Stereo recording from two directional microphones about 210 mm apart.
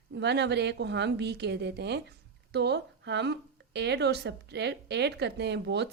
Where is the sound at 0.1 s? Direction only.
55° right (ahead or behind).